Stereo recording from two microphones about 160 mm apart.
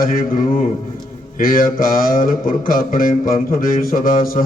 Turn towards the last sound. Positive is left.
turn(degrees=60)  # may be behind; listen again after turning